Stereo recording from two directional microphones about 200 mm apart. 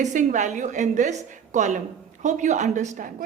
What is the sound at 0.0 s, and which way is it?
A woman's voice, 40° right (ahead or behind).